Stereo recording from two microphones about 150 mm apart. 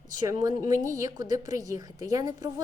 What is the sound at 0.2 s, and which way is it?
A woman's voice, 25° right (ahead or behind).